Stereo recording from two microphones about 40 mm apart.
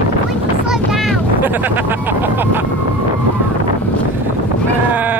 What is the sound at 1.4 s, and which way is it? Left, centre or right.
Speech, right.